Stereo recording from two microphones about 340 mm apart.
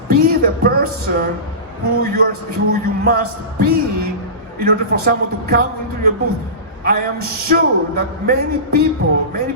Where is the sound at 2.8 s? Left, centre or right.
Right.